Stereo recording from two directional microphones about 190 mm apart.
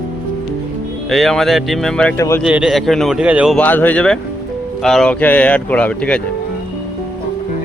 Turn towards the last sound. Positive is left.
turn(degrees=5)  # may be behind; listen again after turning